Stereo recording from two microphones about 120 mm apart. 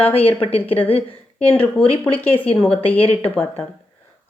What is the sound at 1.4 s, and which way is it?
Speech, 10° left (ahead or behind).